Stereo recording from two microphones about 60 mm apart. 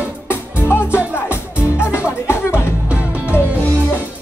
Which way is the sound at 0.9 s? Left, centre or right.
Right.